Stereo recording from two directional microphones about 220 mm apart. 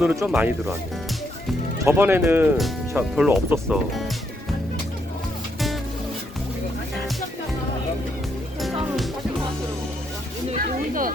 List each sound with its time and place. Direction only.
0.0 s speech: 5° right (ahead or behind)
1.8 s speech: 10° right (ahead or behind)
10.5 s a sound: 40° right (ahead or behind)